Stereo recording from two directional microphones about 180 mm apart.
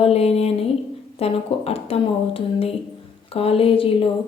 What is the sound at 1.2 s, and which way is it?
Speech, 35° left (ahead or behind).